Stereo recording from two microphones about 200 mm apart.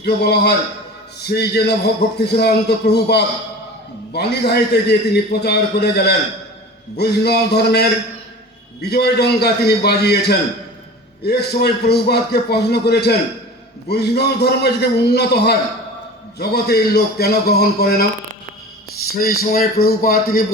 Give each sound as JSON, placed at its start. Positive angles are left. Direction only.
{"t": 0.0, "sound": "a man's voice", "side_deg": 55}
{"t": 19.2, "sound": "a man's voice", "side_deg": 50}